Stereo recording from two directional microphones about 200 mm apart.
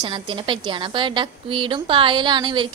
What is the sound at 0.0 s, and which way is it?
A woman's voice, 25° right (ahead or behind).